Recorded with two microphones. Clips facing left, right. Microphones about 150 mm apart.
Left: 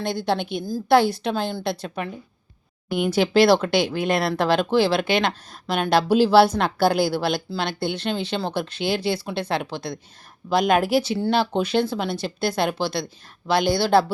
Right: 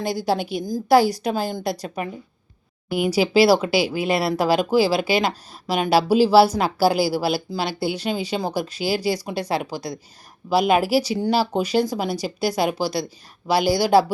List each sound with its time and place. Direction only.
0.0 s a woman's voice: 5° right (ahead or behind)